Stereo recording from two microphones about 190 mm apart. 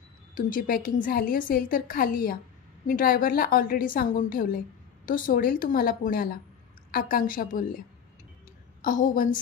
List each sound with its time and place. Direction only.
0.3 s a woman's voice: 45° left (ahead or behind)
8.8 s a woman's voice: 45° left (ahead or behind)